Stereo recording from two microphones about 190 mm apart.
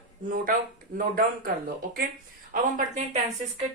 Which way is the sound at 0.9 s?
50° right (ahead or behind).